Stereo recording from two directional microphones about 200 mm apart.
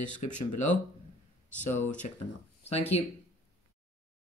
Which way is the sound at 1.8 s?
40° left (ahead or behind).